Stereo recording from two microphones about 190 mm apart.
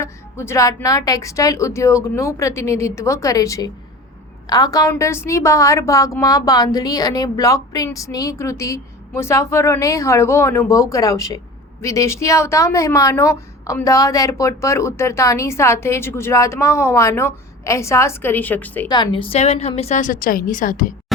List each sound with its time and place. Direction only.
0.0 s a woman's voice: 15° left (ahead or behind)
18.9 s a woman's voice: 25° left (ahead or behind); by 20.9 s 45° left (ahead or behind)